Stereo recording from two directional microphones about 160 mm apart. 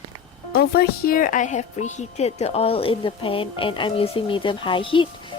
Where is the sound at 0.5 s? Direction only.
80° left.